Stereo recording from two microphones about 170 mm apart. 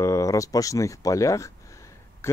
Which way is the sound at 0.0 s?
20° left (ahead or behind).